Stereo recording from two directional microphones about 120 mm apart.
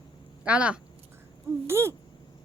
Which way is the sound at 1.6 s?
20° right (ahead or behind).